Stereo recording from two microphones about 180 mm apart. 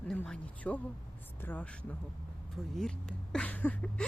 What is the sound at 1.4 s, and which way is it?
Speech, 10° left (ahead or behind).